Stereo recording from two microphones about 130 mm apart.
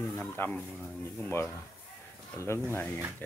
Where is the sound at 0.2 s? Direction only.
15° left (ahead or behind).